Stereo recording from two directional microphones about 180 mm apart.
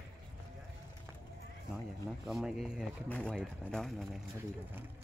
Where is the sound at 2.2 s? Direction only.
Centre (ahead or behind).